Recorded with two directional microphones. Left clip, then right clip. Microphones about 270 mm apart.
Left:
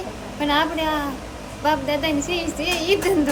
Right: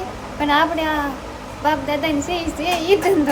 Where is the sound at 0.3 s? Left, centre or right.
Centre.